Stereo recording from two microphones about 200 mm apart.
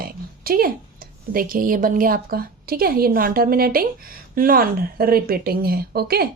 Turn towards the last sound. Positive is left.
turn(degrees=-50)  # may be behind; listen again after turning